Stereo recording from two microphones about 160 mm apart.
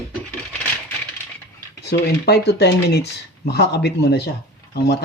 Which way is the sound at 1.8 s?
90° left.